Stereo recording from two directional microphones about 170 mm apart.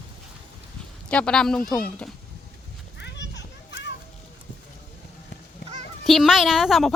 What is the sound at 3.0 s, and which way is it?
Children playing, 90° left.